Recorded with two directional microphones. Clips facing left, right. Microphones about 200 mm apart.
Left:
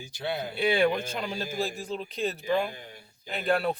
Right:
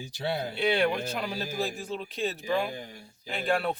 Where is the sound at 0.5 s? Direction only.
Centre (ahead or behind).